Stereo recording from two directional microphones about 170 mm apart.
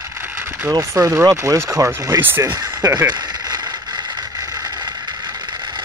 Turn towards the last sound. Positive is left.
turn(degrees=-25)  # may be behind; listen again after turning